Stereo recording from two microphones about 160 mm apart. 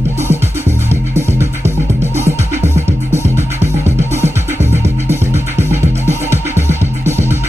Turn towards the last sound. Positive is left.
turn(degrees=-15)  # may be behind; listen again after turning